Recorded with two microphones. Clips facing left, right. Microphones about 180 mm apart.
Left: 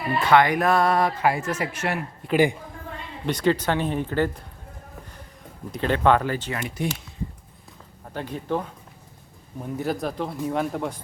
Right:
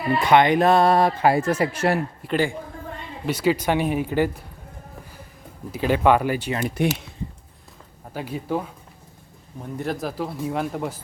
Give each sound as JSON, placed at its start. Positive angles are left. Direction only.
{"t": 0.3, "sound": "speech", "side_deg": -20}
{"t": 2.3, "sound": "speech", "side_deg": 15}
{"t": 3.2, "sound": "speech", "side_deg": -5}
{"t": 5.7, "sound": "speech", "side_deg": -10}
{"t": 6.8, "sound": "speech", "side_deg": -65}
{"t": 8.1, "sound": "speech", "side_deg": -5}
{"t": 9.7, "sound": "speech", "side_deg": 0}